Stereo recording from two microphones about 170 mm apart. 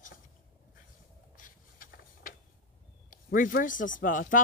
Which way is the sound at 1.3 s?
55° left (ahead or behind).